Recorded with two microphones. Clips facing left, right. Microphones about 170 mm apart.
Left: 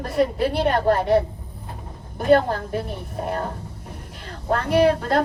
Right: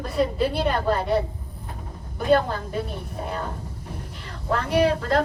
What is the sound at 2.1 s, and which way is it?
Speech, 55° left (ahead or behind).